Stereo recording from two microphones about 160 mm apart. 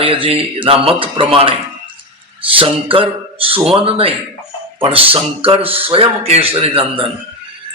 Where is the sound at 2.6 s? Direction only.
35° right (ahead or behind).